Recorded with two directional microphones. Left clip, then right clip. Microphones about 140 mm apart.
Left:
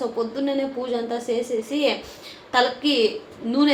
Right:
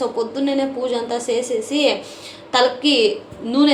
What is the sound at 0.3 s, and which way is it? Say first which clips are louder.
A woman's voice: right 4 dB; 30° right (ahead or behind).